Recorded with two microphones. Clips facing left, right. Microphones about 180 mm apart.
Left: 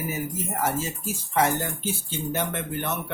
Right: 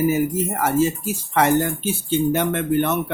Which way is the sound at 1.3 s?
75° right (ahead or behind).